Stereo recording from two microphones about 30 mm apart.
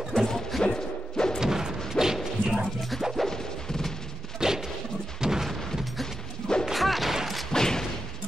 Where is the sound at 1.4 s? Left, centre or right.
Centre.